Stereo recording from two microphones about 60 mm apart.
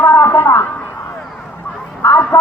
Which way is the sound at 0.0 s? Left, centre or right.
Left.